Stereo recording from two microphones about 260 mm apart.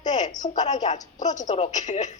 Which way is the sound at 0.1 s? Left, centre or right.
Left.